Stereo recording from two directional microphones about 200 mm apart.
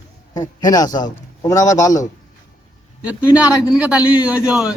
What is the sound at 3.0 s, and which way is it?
A man's voice, 5° right (ahead or behind).